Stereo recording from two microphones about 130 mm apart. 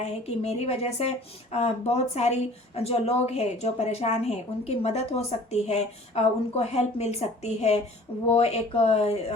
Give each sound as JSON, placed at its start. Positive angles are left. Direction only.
{"t": 0.0, "sound": "a woman's voice", "side_deg": 55}